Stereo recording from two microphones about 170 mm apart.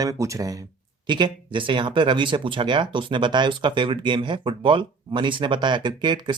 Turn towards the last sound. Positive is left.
turn(degrees=-25)  # may be behind; listen again after turning